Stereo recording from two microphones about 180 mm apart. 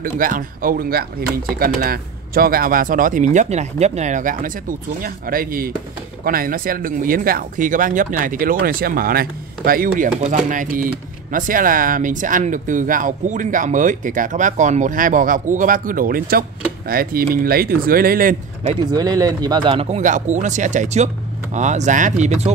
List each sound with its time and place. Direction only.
0.0 s speech: 50° right (ahead or behind)
18.7 s speech: 25° right (ahead or behind)
20.0 s speech: 45° right (ahead or behind)